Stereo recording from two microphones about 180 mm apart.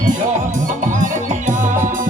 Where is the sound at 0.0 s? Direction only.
45° right (ahead or behind).